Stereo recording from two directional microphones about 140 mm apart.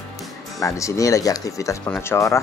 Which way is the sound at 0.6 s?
20° left (ahead or behind).